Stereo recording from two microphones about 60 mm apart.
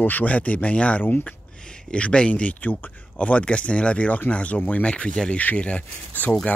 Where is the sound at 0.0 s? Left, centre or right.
Left.